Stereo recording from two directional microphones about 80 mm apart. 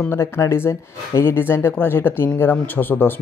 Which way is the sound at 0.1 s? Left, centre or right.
Left.